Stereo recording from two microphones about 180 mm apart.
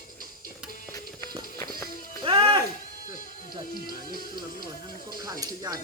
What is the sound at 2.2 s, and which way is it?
Music, 25° right (ahead or behind).